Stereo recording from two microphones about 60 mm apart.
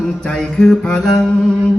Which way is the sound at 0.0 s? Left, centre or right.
Centre.